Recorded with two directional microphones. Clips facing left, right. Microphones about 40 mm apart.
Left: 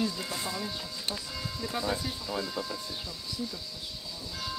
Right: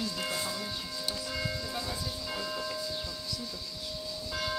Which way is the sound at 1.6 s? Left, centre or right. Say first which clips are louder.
Left 3 dB; left.